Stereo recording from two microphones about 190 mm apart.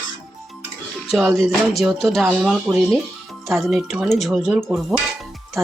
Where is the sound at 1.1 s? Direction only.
Centre (ahead or behind).